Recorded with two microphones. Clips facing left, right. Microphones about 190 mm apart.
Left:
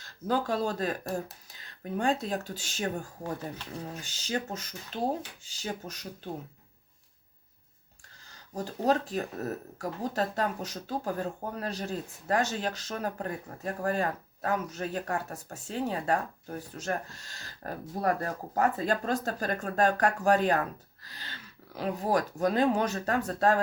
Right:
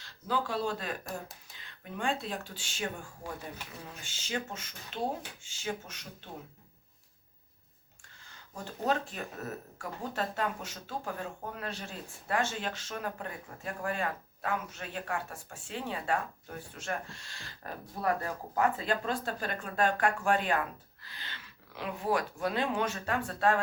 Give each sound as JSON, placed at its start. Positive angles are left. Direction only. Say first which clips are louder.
{"t": 0.0, "sound": "speech", "louder": "left 4 dB", "side_deg": 45}
{"t": 8.3, "sound": "speech", "louder": "left 7 dB", "side_deg": 35}